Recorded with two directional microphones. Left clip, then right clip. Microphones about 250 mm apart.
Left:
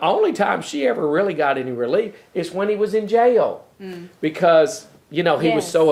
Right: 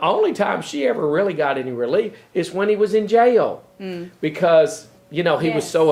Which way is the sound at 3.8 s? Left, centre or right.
Right.